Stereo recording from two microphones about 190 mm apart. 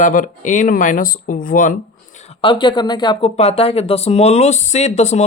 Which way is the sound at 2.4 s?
25° left (ahead or behind).